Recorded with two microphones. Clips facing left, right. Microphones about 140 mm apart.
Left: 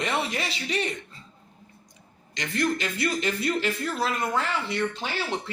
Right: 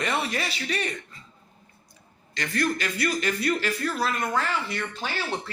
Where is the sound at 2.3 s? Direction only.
20° left (ahead or behind).